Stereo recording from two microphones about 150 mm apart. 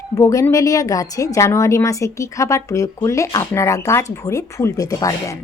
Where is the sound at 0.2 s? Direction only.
20° left (ahead or behind).